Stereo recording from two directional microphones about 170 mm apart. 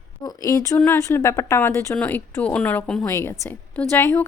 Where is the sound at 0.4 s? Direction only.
20° left (ahead or behind).